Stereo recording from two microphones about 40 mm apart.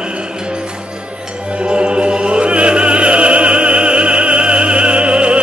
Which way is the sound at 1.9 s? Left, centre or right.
Right.